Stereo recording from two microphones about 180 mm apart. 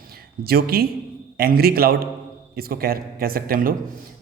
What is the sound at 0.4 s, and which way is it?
Speech, 55° right (ahead or behind).